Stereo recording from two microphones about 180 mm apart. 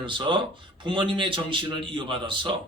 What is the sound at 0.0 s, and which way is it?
Speech, 25° right (ahead or behind).